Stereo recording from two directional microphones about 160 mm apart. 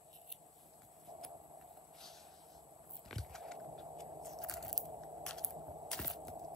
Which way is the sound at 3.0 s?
Centre (ahead or behind).